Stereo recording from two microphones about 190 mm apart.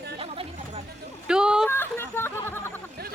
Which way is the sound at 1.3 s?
5° right (ahead or behind).